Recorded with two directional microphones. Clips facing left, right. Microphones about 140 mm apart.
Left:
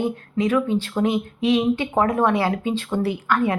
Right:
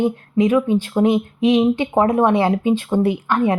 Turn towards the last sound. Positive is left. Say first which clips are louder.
# right 3 dB
turn(degrees=-25)  # may be behind; listen again after turning